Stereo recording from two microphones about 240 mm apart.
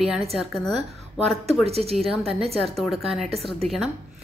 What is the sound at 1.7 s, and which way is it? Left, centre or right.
Speech, right.